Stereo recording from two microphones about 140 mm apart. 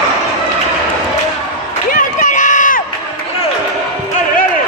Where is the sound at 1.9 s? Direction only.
65° left (ahead or behind).